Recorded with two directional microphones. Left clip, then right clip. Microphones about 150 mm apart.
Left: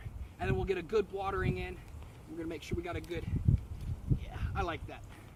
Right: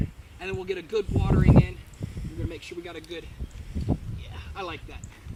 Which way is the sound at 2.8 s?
10° left (ahead or behind).